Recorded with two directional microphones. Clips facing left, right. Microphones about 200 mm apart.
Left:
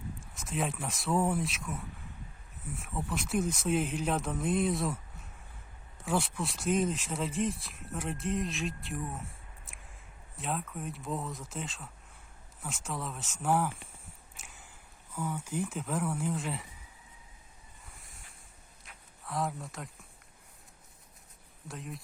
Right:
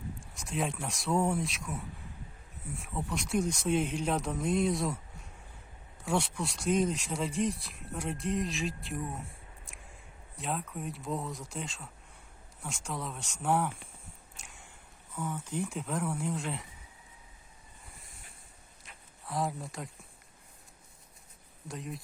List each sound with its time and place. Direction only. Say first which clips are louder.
0.2 s speech: even; centre (ahead or behind)
6.1 s speech: even; centre (ahead or behind)
18.9 s a sound: even; centre (ahead or behind)
21.7 s speech: right 2 dB; centre (ahead or behind)